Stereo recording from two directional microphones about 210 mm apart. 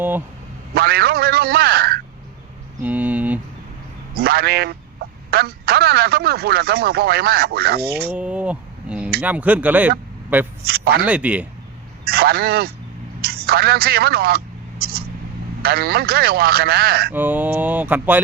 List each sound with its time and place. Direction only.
0.7 s speech: 50° right (ahead or behind)
2.8 s mantra: 10° right (ahead or behind)
4.1 s speech: 50° right (ahead or behind)
8.1 s a sound: 5° right (ahead or behind)
9.2 s speech: 5° right (ahead or behind)
10.7 s speech: 50° right (ahead or behind)
11.0 s speech: 5° right (ahead or behind)
12.0 s speech: 50° right (ahead or behind)
13.2 s a sound: 50° right (ahead or behind)
15.6 s speech: 50° right (ahead or behind)
17.1 s speech: 10° right (ahead or behind)